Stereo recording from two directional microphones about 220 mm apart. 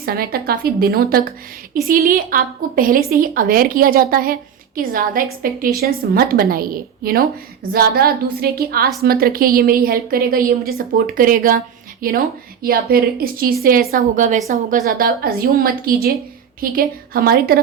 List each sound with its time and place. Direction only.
0.0 s a woman's voice: 40° right (ahead or behind)